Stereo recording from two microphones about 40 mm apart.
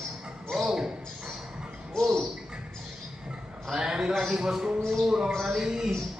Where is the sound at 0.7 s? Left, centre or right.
Centre.